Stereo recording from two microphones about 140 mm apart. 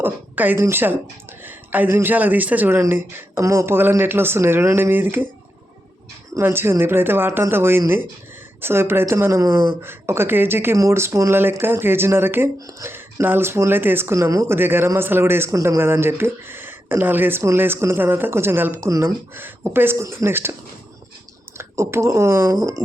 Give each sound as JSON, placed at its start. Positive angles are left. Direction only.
{"t": 0.0, "sound": "speech", "side_deg": -15}
{"t": 6.3, "sound": "speech", "side_deg": -15}
{"t": 21.6, "sound": "speech", "side_deg": -20}